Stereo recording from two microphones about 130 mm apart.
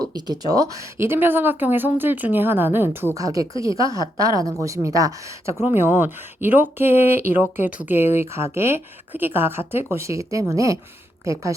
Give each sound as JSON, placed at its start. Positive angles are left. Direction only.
{"t": 0.0, "sound": "a sound", "side_deg": -30}
{"t": 0.5, "sound": "speech", "side_deg": -25}
{"t": 3.2, "sound": "a woman's voice", "side_deg": -25}
{"t": 3.8, "sound": "speech", "side_deg": 35}
{"t": 4.2, "sound": "a woman's voice", "side_deg": -25}